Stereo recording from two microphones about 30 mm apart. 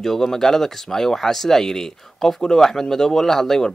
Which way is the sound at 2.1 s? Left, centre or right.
Centre.